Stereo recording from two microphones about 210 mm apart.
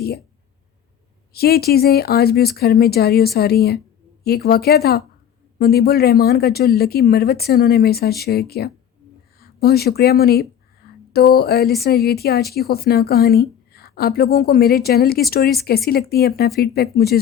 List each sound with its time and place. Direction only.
1.3 s a woman's voice: 50° left (ahead or behind)